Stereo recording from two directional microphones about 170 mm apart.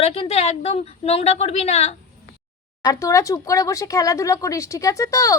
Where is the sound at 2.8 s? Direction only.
20° left (ahead or behind).